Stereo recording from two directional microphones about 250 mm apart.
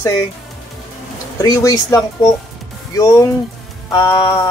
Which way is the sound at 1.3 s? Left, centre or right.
Centre.